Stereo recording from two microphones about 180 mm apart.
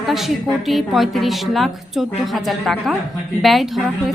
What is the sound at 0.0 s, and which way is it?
Speech, centre (ahead or behind).